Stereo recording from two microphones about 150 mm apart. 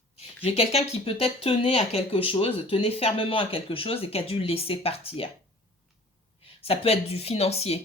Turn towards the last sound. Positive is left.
turn(degrees=45)  # may be behind; listen again after turning